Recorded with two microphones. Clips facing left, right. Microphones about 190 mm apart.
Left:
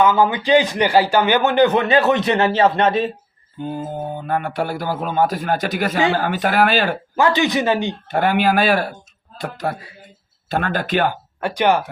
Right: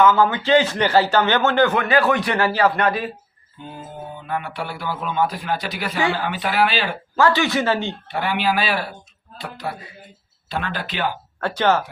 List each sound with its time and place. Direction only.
0.0 s a man's voice: 15° left (ahead or behind)
3.6 s speech: 45° left (ahead or behind)
7.2 s a man's voice: 20° left (ahead or behind)
8.1 s speech: 50° left (ahead or behind)
11.3 s speech: 15° left (ahead or behind)